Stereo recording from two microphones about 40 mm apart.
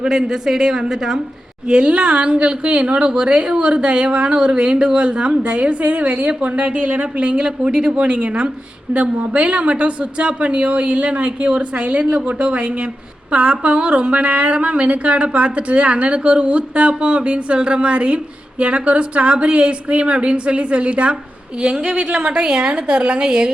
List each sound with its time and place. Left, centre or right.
0.0 s a man's voice: centre
1.6 s a woman's voice: right